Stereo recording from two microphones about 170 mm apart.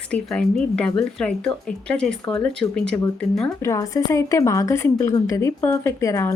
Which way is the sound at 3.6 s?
20° left (ahead or behind).